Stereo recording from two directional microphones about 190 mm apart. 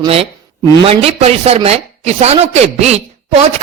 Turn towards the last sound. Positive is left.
turn(degrees=-35)  # may be behind; listen again after turning